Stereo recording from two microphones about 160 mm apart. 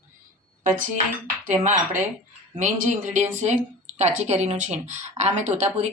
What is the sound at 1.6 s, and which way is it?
A woman's voice, 55° right (ahead or behind).